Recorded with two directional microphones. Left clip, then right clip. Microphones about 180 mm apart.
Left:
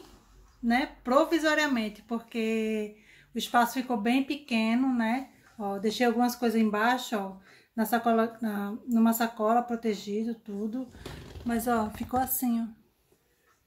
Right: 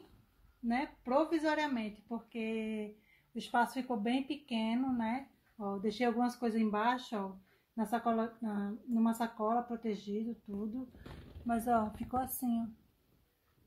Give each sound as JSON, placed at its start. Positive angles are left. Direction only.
{"t": 0.7, "sound": "speech", "side_deg": -10}
{"t": 11.7, "sound": "speech", "side_deg": -15}